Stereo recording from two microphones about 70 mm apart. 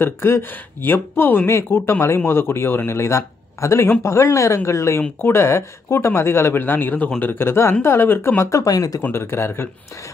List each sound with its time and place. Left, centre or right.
0.0 s speech: left
9.0 s speech: left